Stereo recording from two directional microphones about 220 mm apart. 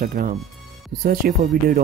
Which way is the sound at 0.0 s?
40° right (ahead or behind).